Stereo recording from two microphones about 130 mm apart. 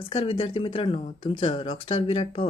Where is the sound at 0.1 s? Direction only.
45° left (ahead or behind).